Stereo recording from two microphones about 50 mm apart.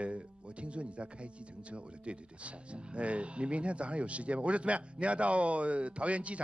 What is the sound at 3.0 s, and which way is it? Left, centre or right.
A man's voice, right.